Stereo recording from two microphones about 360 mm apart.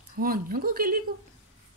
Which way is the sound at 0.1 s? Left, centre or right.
Right.